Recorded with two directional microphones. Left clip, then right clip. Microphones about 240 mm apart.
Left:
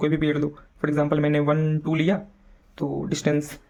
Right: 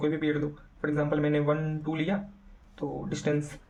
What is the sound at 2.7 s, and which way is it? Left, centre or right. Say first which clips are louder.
Speech: left 7 dB; left.